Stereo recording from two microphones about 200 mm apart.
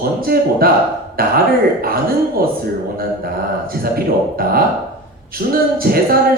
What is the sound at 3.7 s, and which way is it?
Speech, 50° right (ahead or behind).